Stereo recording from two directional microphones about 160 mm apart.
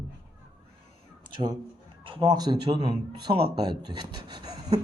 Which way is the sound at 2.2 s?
25° right (ahead or behind).